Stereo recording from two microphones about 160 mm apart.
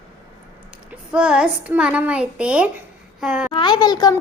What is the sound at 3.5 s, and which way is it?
Speech, 30° left (ahead or behind).